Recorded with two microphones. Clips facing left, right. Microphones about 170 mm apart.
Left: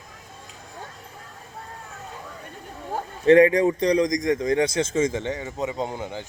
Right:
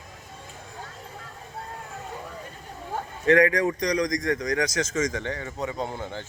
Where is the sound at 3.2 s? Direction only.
25° left (ahead or behind).